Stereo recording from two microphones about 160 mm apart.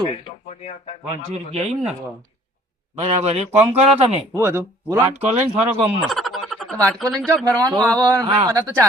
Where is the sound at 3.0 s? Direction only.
40° right (ahead or behind).